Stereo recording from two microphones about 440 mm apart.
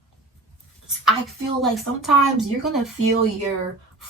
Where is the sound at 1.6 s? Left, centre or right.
Centre.